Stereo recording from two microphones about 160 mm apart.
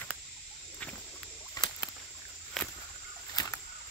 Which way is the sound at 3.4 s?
25° left (ahead or behind).